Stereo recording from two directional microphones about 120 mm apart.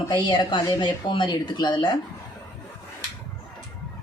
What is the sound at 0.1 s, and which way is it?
Speech, 40° left (ahead or behind).